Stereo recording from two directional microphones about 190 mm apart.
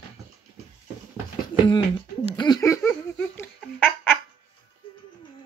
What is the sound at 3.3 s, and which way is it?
Fowl, 10° left (ahead or behind).